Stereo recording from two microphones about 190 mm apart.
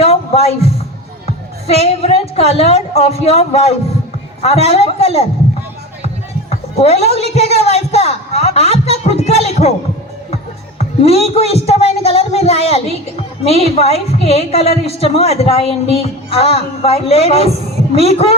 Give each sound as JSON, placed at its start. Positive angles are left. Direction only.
{"t": 0.0, "sound": "a sound", "side_deg": 30}
{"t": 1.6, "sound": "a woman's voice", "side_deg": 30}
{"t": 6.7, "sound": "a woman's voice", "side_deg": 35}
{"t": 10.8, "sound": "a woman's voice", "side_deg": 35}